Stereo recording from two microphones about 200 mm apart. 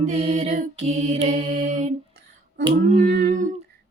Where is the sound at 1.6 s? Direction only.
40° right (ahead or behind).